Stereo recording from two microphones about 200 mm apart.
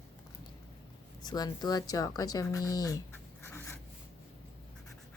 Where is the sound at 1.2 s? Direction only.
20° left (ahead or behind).